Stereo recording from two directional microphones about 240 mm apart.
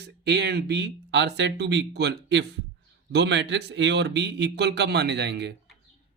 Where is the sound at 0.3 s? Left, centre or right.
Right.